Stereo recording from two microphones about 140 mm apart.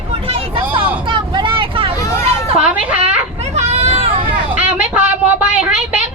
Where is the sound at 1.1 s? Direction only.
35° right (ahead or behind).